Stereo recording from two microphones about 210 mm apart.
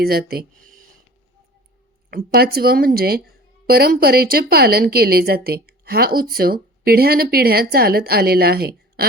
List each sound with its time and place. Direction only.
0.0 s speech: 45° right (ahead or behind)
2.0 s speech: 45° right (ahead or behind)